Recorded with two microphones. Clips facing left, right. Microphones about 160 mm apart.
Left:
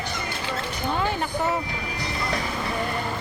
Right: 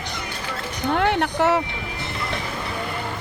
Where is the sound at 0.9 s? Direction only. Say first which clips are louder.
Right 6 dB; 70° right (ahead or behind).